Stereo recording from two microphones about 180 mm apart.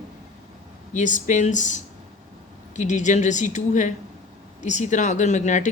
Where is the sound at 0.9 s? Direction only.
45° left (ahead or behind).